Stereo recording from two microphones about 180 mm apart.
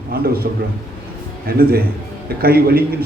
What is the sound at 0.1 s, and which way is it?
Speech, 55° right (ahead or behind).